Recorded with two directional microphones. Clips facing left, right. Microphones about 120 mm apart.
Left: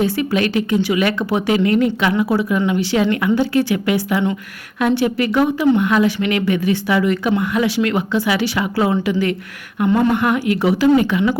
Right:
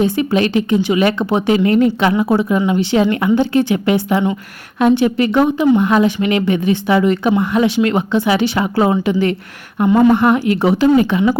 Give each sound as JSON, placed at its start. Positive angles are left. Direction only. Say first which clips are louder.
{"t": 0.0, "sound": "speech", "louder": "right 3 dB", "side_deg": -25}